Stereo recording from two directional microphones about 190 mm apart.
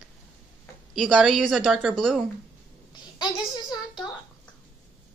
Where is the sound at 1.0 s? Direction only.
5° right (ahead or behind).